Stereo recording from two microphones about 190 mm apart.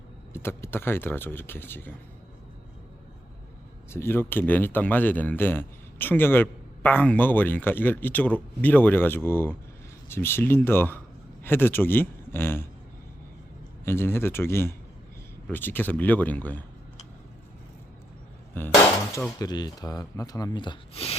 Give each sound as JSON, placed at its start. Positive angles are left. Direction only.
{"t": 0.3, "sound": "speech", "side_deg": 10}
{"t": 3.8, "sound": "speech", "side_deg": 15}
{"t": 13.8, "sound": "speech", "side_deg": 10}
{"t": 18.5, "sound": "speech", "side_deg": 10}